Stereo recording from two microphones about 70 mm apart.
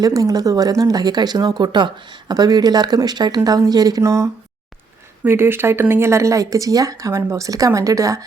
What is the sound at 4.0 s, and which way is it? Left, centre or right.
Speech, right.